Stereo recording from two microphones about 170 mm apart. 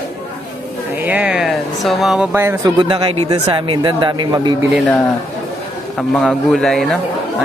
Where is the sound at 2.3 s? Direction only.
15° right (ahead or behind).